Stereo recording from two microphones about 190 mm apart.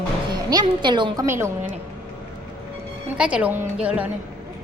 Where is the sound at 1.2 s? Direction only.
15° right (ahead or behind).